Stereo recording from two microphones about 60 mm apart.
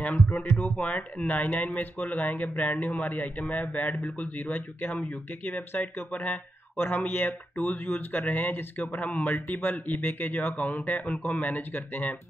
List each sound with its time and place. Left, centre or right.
0.0 s speech: left